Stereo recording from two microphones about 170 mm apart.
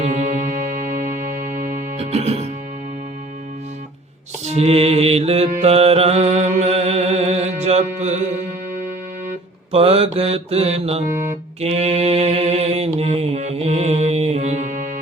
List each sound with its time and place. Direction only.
0.0 s music: 40° right (ahead or behind)
2.0 s mantra: 35° right (ahead or behind)
4.4 s mantra: 35° right (ahead or behind)
9.7 s mantra: 35° right (ahead or behind)